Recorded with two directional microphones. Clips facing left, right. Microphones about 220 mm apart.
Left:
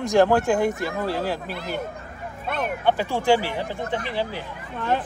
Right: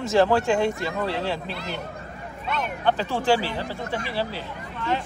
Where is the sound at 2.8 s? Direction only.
10° left (ahead or behind).